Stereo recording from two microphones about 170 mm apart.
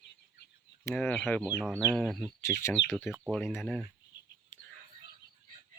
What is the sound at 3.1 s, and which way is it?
Speech, 5° right (ahead or behind).